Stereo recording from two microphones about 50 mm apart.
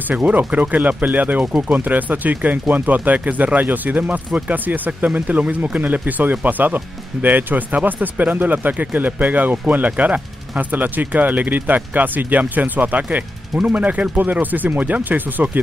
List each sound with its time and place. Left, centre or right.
0.1 s speech: right